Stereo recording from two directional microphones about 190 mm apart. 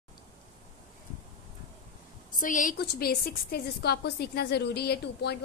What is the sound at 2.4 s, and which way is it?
A woman's voice, 45° left (ahead or behind).